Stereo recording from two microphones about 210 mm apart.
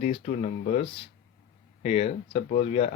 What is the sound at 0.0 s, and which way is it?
Speech, 30° left (ahead or behind).